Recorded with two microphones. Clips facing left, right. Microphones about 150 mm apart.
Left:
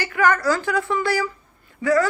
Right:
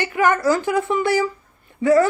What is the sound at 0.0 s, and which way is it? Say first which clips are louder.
A woman's voice: right 2 dB; 20° right (ahead or behind).